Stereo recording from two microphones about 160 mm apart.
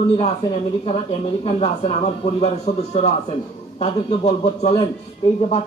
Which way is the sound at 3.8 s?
40° left (ahead or behind).